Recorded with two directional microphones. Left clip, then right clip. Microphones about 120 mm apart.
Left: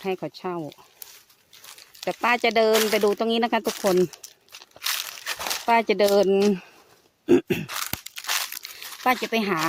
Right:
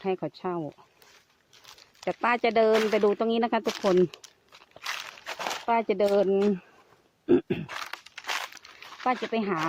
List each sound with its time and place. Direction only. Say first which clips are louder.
0.0 s speech: left 1 dB; 20° left (ahead or behind)
1.6 s crumpling: left 7 dB; centre (ahead or behind)
2.0 s speech: left 3 dB; 35° left (ahead or behind)
3.8 s speech: left 1 dB; 15° left (ahead or behind)
4.7 s crunch: left 6 dB; 30° left (ahead or behind)
5.4 s a sound: left 1 dB; 10° left (ahead or behind)
5.6 s speech: left 5 dB; 65° left (ahead or behind)
7.7 s a sound: left 5 dB; 35° left (ahead or behind)
9.0 s speech: left 5 dB; 60° left (ahead or behind)